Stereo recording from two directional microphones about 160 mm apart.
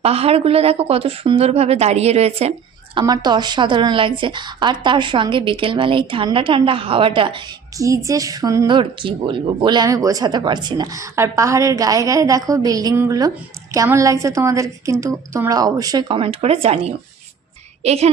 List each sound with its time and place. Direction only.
0.0 s a woman's voice: 40° right (ahead or behind)
2.9 s a woman's voice: 25° right (ahead or behind)
7.8 s a woman's voice: 20° right (ahead or behind); by 18.1 s 40° right (ahead or behind)